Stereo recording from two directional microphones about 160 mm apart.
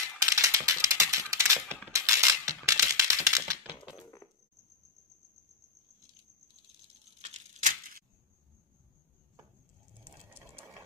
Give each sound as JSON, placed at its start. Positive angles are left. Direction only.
{"t": 0.2, "sound": "a sound", "side_deg": -20}
{"t": 1.9, "sound": "typing", "side_deg": -20}
{"t": 7.2, "sound": "tearing", "side_deg": -45}